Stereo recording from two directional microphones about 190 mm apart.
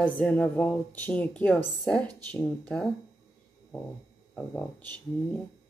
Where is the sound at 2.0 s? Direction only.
20° right (ahead or behind).